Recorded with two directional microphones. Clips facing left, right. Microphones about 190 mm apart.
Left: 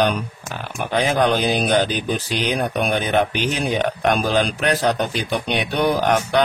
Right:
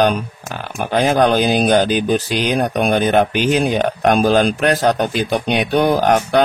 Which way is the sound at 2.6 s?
45° right (ahead or behind).